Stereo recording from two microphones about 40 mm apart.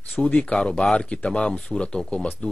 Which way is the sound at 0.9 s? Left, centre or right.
Left.